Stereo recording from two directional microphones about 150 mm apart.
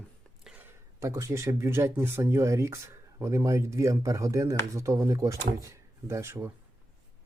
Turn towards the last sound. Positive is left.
turn(degrees=-15)  # may be behind; listen again after turning